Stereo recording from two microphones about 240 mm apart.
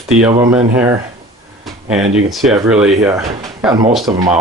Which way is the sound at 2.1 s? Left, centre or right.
Centre.